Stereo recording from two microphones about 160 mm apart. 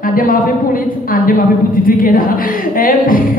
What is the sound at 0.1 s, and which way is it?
Speech, 60° left (ahead or behind).